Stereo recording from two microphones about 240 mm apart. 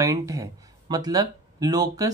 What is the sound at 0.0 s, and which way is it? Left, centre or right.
Speech, centre.